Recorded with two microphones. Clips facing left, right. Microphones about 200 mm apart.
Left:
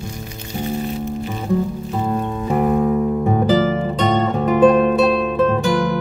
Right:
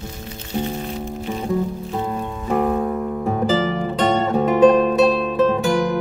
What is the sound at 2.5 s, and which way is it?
Music, 5° left (ahead or behind).